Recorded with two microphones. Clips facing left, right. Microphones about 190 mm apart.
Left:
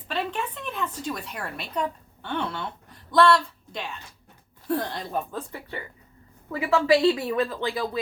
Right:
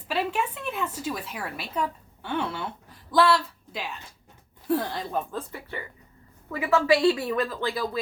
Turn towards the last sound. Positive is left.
turn(degrees=20)  # may be behind; listen again after turning